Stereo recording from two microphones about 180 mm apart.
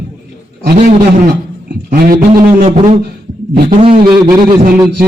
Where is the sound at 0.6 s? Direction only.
45° right (ahead or behind).